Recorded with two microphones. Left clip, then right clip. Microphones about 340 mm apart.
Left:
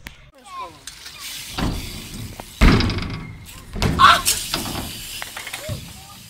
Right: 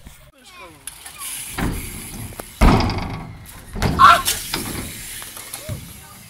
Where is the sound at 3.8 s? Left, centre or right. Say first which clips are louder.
Right 2 dB; centre.